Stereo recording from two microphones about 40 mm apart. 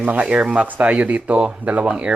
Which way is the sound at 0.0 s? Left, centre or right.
Right.